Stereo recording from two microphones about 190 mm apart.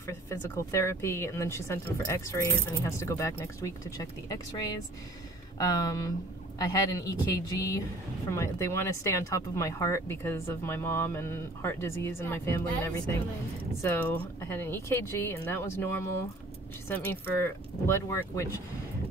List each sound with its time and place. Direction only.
0.0 s speech: 15° left (ahead or behind)